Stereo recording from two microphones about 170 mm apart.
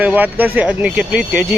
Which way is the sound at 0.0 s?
10° right (ahead or behind).